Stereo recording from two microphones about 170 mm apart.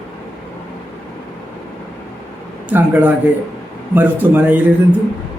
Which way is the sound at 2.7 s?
10° right (ahead or behind).